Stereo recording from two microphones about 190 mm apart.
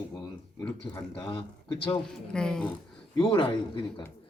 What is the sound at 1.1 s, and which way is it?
Speech, 30° left (ahead or behind).